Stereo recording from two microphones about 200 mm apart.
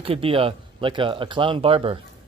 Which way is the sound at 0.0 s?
25° right (ahead or behind).